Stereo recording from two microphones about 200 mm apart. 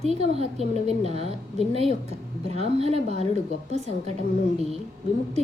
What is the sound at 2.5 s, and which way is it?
Speech, 30° right (ahead or behind).